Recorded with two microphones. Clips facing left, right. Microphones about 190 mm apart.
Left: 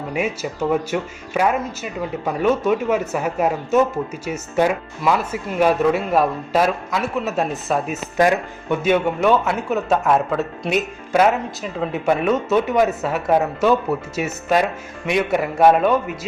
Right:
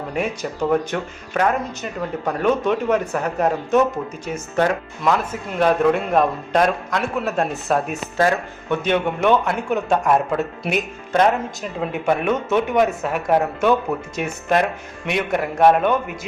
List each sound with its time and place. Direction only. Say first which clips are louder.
0.7 s speech: even; 5° left (ahead or behind)
8.1 s speech: left 2 dB; 15° left (ahead or behind)
8.8 s a man's voice: left 2 dB; 5° left (ahead or behind)